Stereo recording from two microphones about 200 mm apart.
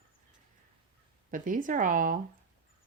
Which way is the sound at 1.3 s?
40° right (ahead or behind).